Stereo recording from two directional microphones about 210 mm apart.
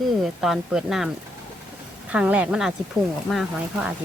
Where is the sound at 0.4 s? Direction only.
Centre (ahead or behind).